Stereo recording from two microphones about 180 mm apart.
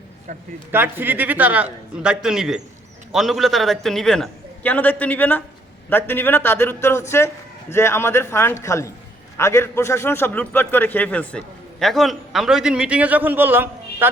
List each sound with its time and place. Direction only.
0.3 s a man's voice: 45° right (ahead or behind)
0.7 s a man's voice: 10° right (ahead or behind)